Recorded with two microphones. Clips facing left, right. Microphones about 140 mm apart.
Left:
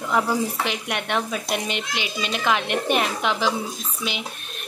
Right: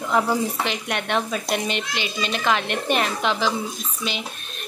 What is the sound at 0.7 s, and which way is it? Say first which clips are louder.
A child's voice: right 1 dB; 10° left (ahead or behind).